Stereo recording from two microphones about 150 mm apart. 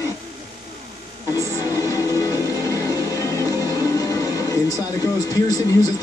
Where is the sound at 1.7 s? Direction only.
20° left (ahead or behind).